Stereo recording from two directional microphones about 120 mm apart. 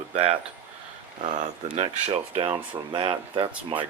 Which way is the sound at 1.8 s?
60° right (ahead or behind).